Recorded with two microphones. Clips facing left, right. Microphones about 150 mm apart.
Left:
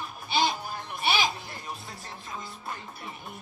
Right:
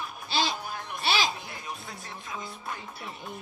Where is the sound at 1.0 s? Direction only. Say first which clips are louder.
Left 1 dB; 90° right.